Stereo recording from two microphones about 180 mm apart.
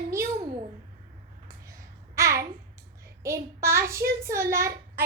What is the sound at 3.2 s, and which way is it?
A woman's voice, 15° right (ahead or behind).